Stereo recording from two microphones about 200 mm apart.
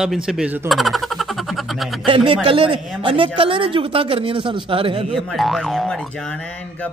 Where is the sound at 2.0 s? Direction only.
25° right (ahead or behind).